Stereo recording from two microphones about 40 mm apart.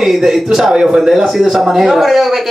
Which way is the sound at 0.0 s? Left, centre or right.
Centre.